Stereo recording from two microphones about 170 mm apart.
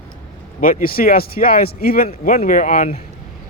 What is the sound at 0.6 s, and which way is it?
Speech, 55° left (ahead or behind).